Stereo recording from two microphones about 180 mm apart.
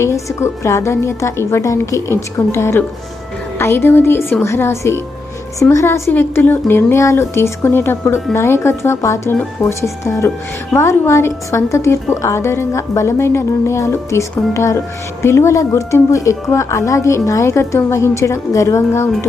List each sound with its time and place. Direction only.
0.0 s a woman's voice: 15° left (ahead or behind)